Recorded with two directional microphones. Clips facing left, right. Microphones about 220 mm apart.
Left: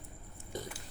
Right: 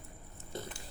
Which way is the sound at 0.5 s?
15° left (ahead or behind).